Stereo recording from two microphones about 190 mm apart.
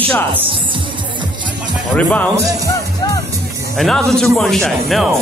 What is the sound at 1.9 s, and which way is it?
Speech, 10° left (ahead or behind).